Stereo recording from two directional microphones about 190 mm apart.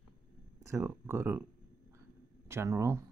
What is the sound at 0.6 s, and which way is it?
Speech, 15° right (ahead or behind).